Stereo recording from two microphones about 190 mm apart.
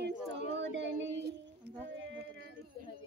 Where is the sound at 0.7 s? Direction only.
75° right (ahead or behind).